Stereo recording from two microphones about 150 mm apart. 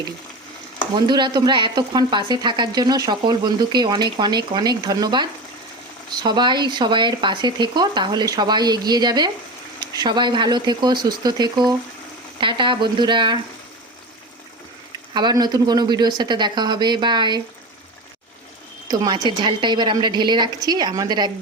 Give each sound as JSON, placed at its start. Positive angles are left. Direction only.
{"t": 0.9, "sound": "speech", "side_deg": -30}
{"t": 15.1, "sound": "speech", "side_deg": -30}
{"t": 18.9, "sound": "speech", "side_deg": -30}